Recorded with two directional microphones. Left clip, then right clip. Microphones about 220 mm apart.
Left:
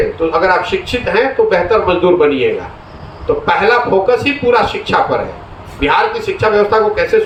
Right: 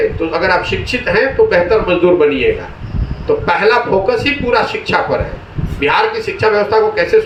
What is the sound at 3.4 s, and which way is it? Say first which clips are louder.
Speech: left 1 dB; 30° right (ahead or behind).